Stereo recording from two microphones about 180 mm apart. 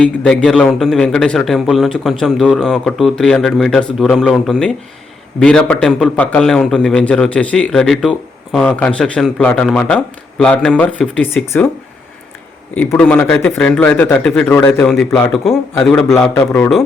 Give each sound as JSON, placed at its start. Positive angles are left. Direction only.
{"t": 0.0, "sound": "a man's voice", "side_deg": 5}
{"t": 12.7, "sound": "speech", "side_deg": 10}
{"t": 16.1, "sound": "speech", "side_deg": 15}
{"t": 16.5, "sound": "a man's voice", "side_deg": 0}